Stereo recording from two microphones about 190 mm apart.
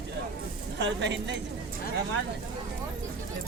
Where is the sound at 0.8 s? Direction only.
70° right (ahead or behind).